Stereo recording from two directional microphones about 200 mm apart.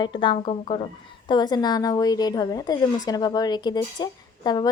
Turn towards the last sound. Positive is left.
turn(degrees=20)  # may be behind; listen again after turning